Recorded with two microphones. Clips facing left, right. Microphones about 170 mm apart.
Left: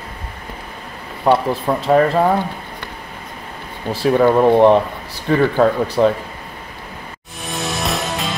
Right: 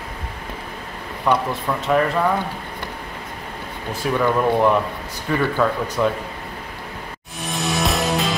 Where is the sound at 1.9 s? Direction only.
35° left (ahead or behind).